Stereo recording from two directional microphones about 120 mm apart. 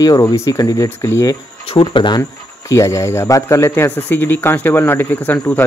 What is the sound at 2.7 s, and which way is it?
A man's voice, 25° left (ahead or behind).